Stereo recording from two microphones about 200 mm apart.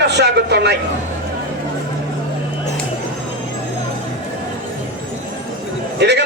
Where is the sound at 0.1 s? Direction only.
60° right (ahead or behind).